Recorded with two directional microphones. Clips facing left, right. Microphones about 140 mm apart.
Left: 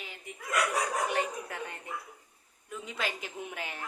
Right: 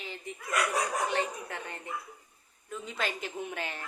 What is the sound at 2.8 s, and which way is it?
Speech, 10° left (ahead or behind).